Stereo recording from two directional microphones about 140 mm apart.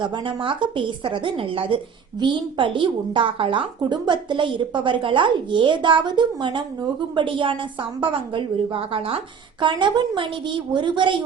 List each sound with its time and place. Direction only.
0.0 s a woman's voice: 35° right (ahead or behind)